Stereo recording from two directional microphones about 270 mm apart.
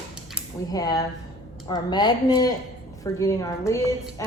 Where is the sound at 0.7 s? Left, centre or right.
Centre.